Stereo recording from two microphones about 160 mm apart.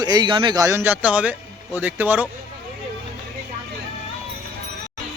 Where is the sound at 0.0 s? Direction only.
25° right (ahead or behind); by 2.2 s 10° right (ahead or behind).